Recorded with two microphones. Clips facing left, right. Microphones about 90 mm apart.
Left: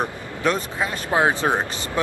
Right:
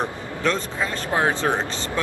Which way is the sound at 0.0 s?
10° left (ahead or behind).